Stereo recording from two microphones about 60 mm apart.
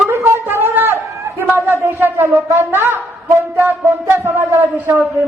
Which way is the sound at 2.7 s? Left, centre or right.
Right.